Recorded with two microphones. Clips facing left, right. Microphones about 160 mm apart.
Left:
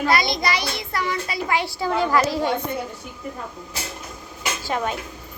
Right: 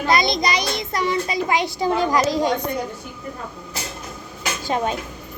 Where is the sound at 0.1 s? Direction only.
20° right (ahead or behind).